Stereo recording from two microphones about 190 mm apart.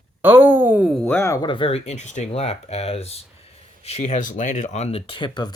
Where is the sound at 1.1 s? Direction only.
15° left (ahead or behind).